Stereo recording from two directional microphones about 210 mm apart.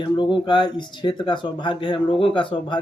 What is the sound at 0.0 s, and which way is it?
Speech, 20° left (ahead or behind).